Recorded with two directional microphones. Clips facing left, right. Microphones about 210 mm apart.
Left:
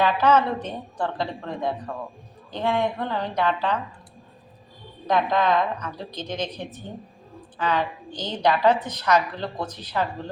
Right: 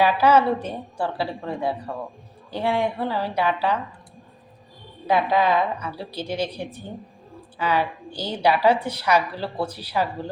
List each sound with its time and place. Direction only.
0.0 s a woman's voice: 10° right (ahead or behind)
5.0 s a woman's voice: 10° right (ahead or behind)